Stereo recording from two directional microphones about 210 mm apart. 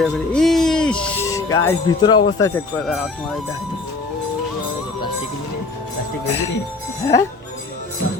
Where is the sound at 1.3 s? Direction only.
15° left (ahead or behind).